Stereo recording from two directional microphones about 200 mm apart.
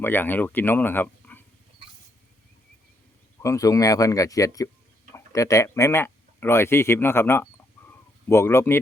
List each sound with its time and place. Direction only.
0.0 s speech: 10° left (ahead or behind)
3.4 s speech: 15° left (ahead or behind)